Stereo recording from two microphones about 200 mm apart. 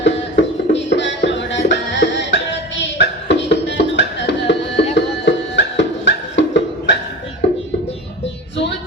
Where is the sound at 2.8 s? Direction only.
60° left (ahead or behind).